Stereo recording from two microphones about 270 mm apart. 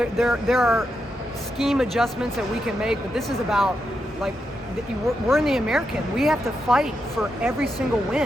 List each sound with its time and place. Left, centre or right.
0.0 s speech: centre
5.3 s speech: centre